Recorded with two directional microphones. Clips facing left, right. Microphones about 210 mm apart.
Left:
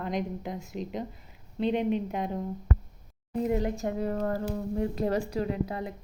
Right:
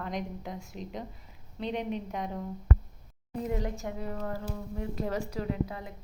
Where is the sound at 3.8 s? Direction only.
45° left (ahead or behind).